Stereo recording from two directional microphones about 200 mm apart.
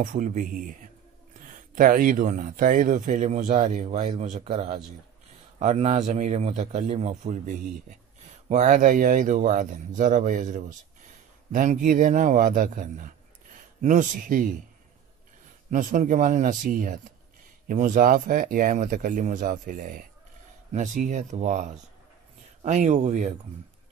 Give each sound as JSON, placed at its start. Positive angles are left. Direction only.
{"t": 0.0, "sound": "speech", "side_deg": -40}
{"t": 1.8, "sound": "speech", "side_deg": -45}
{"t": 15.7, "sound": "speech", "side_deg": -40}